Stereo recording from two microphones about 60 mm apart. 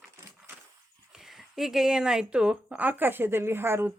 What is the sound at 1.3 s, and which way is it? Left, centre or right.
Speech, centre.